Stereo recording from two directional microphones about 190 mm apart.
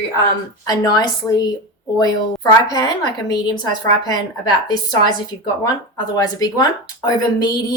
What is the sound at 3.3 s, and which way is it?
Speech, 20° left (ahead or behind).